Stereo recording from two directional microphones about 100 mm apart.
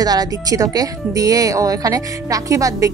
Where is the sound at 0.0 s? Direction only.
40° right (ahead or behind).